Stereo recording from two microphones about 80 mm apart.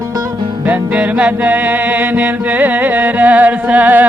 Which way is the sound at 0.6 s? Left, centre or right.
Centre.